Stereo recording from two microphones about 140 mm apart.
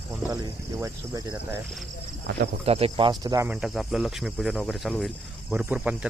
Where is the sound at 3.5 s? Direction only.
Centre (ahead or behind).